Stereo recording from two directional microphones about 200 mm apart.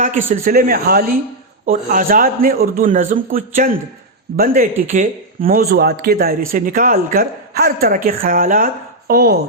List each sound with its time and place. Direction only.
0.3 s a man's voice: 45° right (ahead or behind)